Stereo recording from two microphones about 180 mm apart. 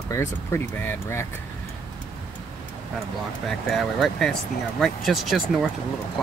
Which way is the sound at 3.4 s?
Centre (ahead or behind).